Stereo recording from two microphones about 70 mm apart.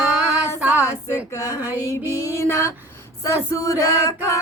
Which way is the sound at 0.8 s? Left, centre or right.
Left.